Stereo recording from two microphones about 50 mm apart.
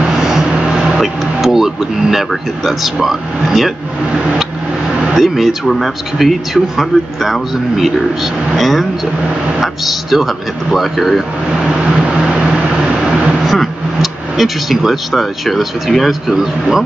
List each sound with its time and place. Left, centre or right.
0.0 s vehicle: centre
1.0 s speech: centre
5.1 s speech: centre
11.8 s vehicle: centre
13.5 s speech: centre